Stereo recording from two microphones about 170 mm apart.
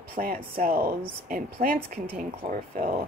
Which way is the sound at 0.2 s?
60° right (ahead or behind).